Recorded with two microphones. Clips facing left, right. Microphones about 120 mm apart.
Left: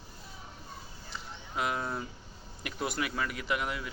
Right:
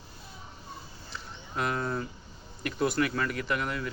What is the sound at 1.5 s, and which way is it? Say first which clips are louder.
Speech: right 2 dB; 5° left (ahead or behind).